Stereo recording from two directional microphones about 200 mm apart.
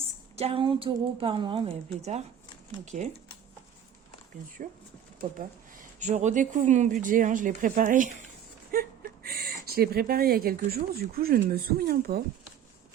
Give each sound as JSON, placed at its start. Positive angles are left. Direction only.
{"t": 0.0, "sound": "a woman's voice", "side_deg": -30}
{"t": 4.6, "sound": "speech", "side_deg": -40}
{"t": 8.7, "sound": "a sound", "side_deg": -45}
{"t": 9.6, "sound": "speech", "side_deg": -50}